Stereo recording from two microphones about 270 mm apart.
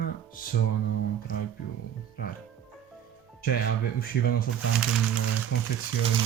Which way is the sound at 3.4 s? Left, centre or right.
Left.